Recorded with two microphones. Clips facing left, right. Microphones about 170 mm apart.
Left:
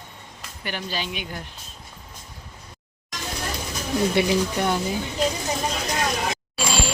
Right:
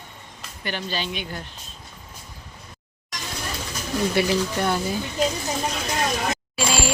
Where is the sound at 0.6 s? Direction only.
10° left (ahead or behind).